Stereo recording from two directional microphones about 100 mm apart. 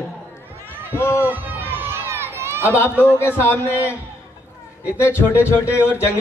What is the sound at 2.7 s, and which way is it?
Speech, 25° left (ahead or behind).